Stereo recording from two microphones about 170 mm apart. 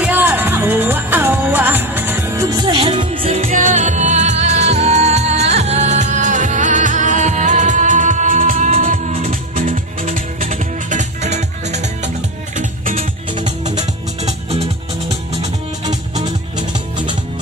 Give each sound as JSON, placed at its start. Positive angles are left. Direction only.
{"t": 0.0, "sound": "music", "side_deg": -10}